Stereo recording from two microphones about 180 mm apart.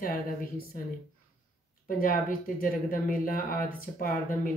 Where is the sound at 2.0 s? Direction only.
50° left (ahead or behind).